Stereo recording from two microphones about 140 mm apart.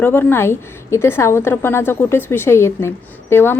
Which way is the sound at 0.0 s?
15° left (ahead or behind).